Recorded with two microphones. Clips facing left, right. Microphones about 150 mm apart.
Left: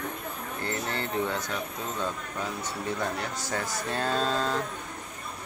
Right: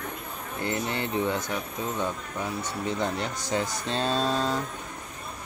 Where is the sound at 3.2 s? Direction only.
20° right (ahead or behind).